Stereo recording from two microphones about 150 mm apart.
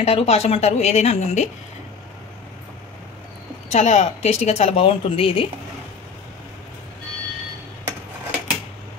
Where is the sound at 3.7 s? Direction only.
50° left (ahead or behind).